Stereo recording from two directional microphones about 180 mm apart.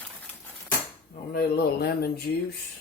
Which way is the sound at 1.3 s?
60° left (ahead or behind).